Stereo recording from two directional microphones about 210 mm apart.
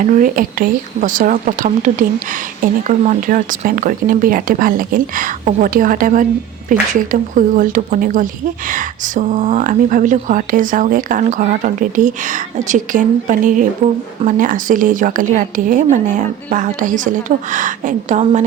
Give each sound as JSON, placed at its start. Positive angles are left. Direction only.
{"t": 0.0, "sound": "speech", "side_deg": -40}